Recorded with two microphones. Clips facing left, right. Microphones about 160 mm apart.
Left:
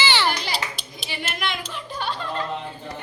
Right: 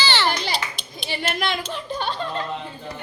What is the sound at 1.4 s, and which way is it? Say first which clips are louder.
Speech: right 4 dB; 30° right (ahead or behind).